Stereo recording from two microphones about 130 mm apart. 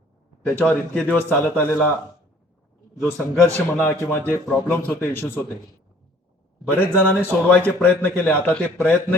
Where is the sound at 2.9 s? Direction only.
20° left (ahead or behind).